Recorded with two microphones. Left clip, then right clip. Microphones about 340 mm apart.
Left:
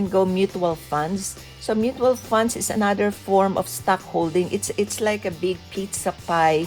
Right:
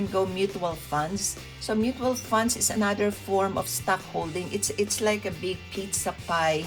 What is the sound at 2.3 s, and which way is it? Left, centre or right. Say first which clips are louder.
Speech: left 4 dB; left.